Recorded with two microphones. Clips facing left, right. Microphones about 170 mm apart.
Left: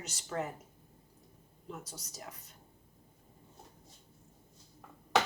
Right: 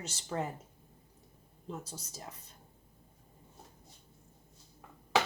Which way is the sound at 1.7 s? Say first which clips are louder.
Right 3 dB; 30° right (ahead or behind).